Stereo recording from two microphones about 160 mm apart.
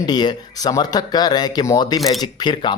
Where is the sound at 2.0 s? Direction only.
Centre (ahead or behind).